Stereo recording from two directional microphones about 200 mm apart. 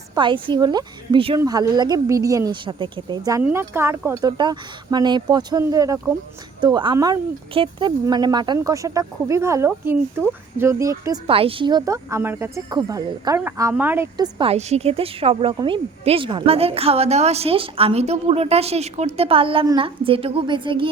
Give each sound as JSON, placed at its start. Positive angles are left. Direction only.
{"t": 0.1, "sound": "a woman's voice", "side_deg": -25}
{"t": 11.3, "sound": "a woman's voice", "side_deg": -30}